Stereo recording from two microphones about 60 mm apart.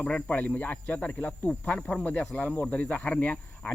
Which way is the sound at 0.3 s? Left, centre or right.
Left.